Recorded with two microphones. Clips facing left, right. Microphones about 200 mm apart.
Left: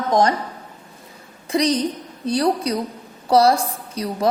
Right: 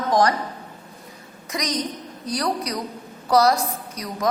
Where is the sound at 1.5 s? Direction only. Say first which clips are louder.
Left 8 dB; 30° left (ahead or behind).